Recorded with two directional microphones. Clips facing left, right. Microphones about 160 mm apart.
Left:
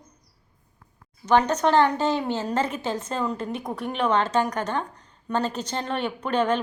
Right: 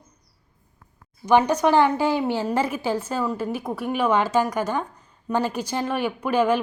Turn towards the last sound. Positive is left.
turn(degrees=-10)  # may be behind; listen again after turning